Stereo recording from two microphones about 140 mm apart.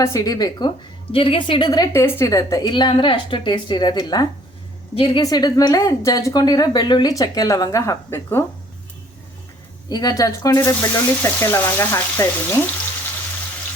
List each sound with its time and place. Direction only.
0.0 s a woman's voice: 25° left (ahead or behind)
1.1 s a woman's voice: 40° left (ahead or behind); by 8.4 s 20° left (ahead or behind)
9.9 s a woman's voice: 25° left (ahead or behind)